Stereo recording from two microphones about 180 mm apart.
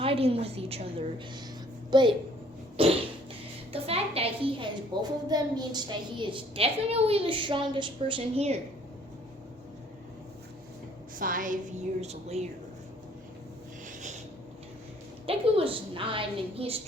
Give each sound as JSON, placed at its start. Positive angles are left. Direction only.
{"t": 0.0, "sound": "a woman's voice", "side_deg": -30}
{"t": 3.7, "sound": "a sound", "side_deg": -35}
{"t": 4.9, "sound": "a woman's voice", "side_deg": -25}
{"t": 11.2, "sound": "a woman's voice", "side_deg": -50}
{"t": 15.3, "sound": "a woman's voice", "side_deg": -30}